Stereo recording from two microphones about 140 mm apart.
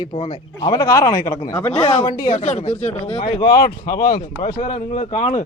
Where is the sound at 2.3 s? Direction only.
50° left (ahead or behind).